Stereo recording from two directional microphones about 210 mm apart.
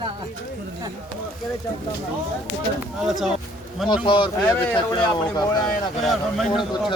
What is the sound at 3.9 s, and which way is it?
Speech, 20° left (ahead or behind).